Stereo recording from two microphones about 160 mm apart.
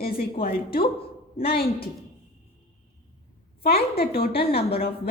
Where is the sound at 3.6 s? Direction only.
75° left (ahead or behind).